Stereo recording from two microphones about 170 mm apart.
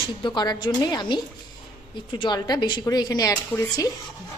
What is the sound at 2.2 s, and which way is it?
Speech, 25° left (ahead or behind).